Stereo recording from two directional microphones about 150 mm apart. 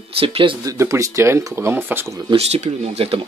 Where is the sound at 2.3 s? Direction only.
45° right (ahead or behind).